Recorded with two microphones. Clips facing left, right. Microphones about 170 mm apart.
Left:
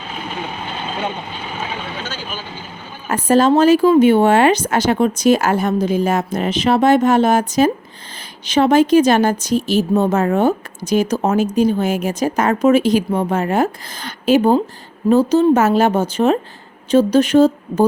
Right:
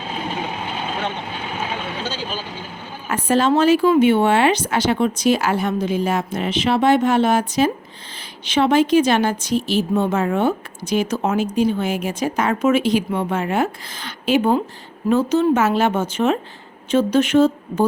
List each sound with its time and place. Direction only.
2.0 s vehicle: 30° right (ahead or behind)
3.1 s a woman's voice: 40° left (ahead or behind)